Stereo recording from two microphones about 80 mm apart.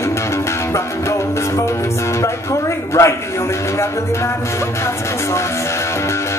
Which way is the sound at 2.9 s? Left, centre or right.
Left.